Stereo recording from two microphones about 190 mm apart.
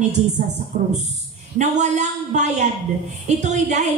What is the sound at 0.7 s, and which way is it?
A woman's voice, 45° right (ahead or behind).